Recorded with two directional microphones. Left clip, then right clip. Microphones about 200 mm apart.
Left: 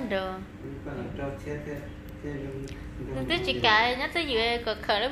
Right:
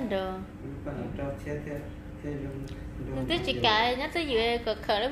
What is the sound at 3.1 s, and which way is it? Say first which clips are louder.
A woman's voice: left 1 dB; 15° right (ahead or behind).